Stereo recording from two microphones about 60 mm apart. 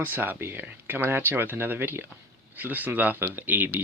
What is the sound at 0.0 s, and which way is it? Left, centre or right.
Speech, right.